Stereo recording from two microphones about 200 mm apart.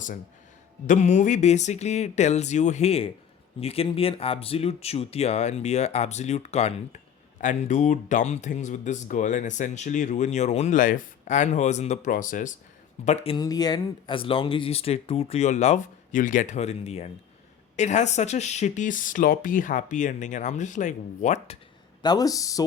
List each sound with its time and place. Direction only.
0.9 s speech: 35° left (ahead or behind)
13.1 s speech: 30° left (ahead or behind)
22.0 s speech: 20° left (ahead or behind)